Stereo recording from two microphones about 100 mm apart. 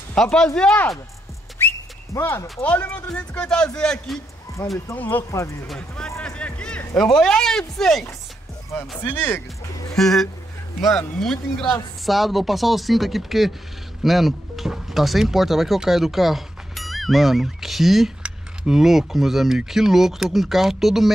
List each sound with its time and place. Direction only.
0.1 s speech: 10° left (ahead or behind)
1.6 s whistling: 25° left (ahead or behind)
2.6 s speech: 15° left (ahead or behind)
5.3 s speech: 30° left (ahead or behind)
5.7 s speech: 5° left (ahead or behind)
6.2 s a sound: 10° left (ahead or behind)
7.0 s speech: 5° left (ahead or behind)
8.7 s speech: 20° left (ahead or behind)
9.9 s speech: 5° left (ahead or behind)